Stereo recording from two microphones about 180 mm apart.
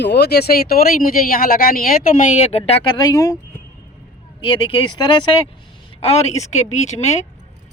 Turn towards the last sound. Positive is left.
turn(degrees=40)  # may be behind; listen again after turning